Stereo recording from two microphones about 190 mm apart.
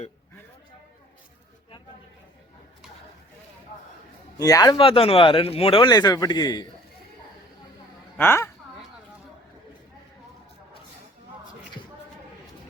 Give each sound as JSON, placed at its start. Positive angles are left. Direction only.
{"t": 4.4, "sound": "speech", "side_deg": 20}
{"t": 8.2, "sound": "speech", "side_deg": 10}